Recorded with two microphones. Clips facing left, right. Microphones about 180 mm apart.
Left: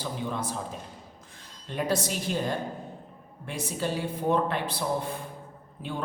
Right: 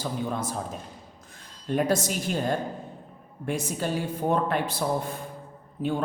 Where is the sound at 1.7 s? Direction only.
50° right (ahead or behind).